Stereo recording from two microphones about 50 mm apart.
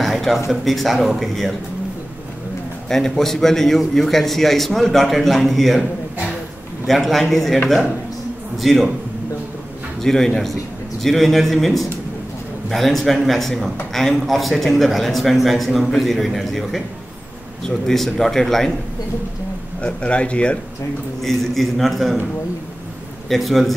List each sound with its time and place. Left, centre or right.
0.0 s a sound: centre
0.5 s a man's voice: centre
2.9 s a man's voice: centre
6.9 s a man's voice: centre
10.0 s a man's voice: centre
19.8 s speech: left
21.2 s a man's voice: centre
23.2 s a man's voice: centre